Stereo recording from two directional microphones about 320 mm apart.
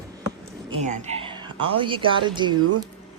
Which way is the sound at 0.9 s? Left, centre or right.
Centre.